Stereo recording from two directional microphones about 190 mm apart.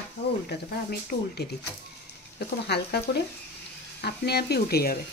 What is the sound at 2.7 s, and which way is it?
Speech, 60° left (ahead or behind).